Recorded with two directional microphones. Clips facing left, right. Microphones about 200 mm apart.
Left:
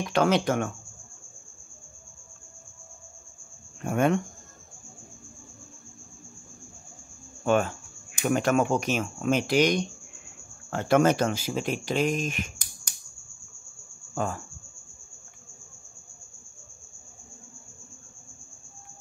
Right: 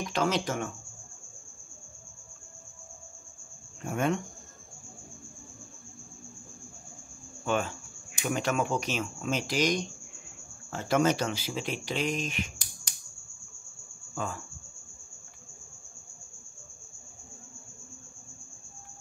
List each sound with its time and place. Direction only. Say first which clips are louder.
0.1 s speech: left 6 dB; 60° left (ahead or behind)
3.8 s speech: left 5 dB; 60° left (ahead or behind)
7.4 s speech: left 6 dB; 50° left (ahead or behind)
14.1 s cricket: left 5 dB; 50° left (ahead or behind)